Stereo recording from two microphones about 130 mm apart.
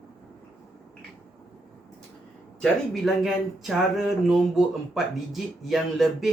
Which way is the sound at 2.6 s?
Centre (ahead or behind).